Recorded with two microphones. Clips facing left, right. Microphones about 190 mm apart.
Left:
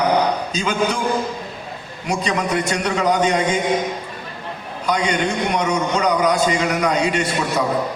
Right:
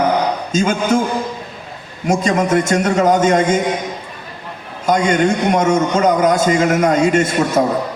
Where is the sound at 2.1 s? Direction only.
45° right (ahead or behind).